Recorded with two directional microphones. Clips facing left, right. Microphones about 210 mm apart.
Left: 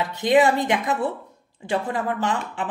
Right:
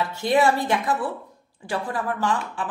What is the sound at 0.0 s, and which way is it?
A woman's voice, 20° left (ahead or behind).